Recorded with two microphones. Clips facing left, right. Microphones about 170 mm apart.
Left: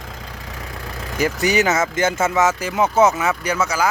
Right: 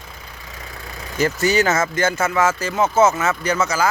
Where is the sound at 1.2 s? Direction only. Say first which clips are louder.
Right 1 dB; 15° left (ahead or behind).